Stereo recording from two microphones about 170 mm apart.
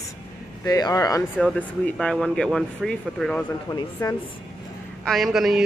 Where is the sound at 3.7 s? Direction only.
20° left (ahead or behind).